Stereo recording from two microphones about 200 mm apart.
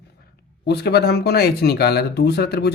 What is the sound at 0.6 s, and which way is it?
Speech, 55° left (ahead or behind).